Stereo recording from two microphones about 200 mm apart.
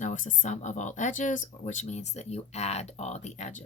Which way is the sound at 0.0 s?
40° left (ahead or behind).